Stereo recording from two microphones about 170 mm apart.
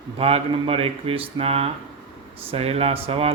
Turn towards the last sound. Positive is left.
turn(degrees=-35)  # may be behind; listen again after turning